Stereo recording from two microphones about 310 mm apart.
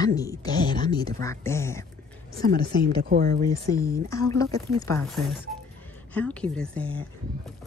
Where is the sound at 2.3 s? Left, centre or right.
Right.